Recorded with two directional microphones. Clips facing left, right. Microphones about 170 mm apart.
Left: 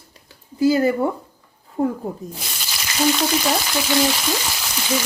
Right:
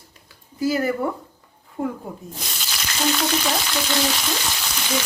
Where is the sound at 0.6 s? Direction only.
25° left (ahead or behind).